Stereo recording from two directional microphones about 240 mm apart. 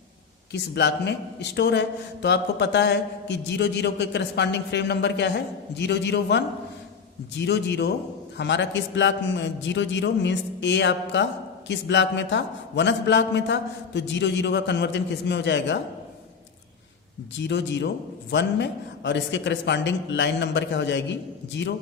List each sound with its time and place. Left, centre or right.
0.5 s a man's voice: left
17.3 s a man's voice: left